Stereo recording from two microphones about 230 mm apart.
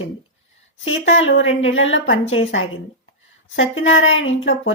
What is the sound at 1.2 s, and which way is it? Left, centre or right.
A woman's voice, left.